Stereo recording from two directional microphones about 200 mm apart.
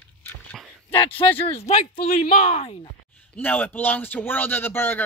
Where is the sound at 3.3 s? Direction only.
10° left (ahead or behind).